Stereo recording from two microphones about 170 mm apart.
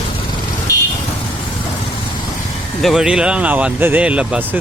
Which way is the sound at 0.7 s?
20° left (ahead or behind).